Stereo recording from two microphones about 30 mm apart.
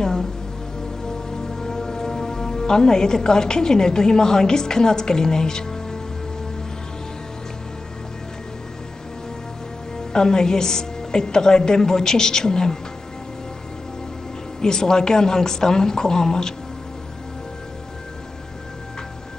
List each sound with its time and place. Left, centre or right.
0.0 s music: centre
1.0 s speech: centre
9.9 s a woman's voice: left
14.6 s a woman's voice: left